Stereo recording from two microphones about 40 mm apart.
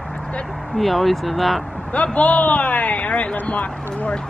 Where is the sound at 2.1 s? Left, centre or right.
Left.